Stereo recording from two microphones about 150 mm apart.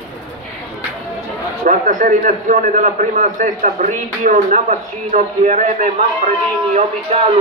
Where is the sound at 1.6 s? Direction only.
60° right (ahead or behind).